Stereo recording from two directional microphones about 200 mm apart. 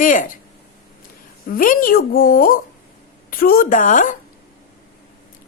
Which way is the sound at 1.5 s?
45° left (ahead or behind).